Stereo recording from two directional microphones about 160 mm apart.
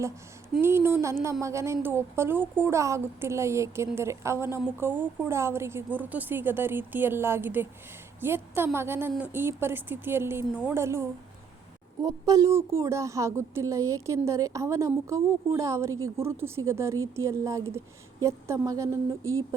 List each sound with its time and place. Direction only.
0.6 s a woman's voice: 15° right (ahead or behind)